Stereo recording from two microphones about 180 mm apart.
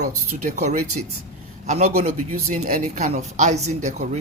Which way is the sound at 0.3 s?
40° right (ahead or behind).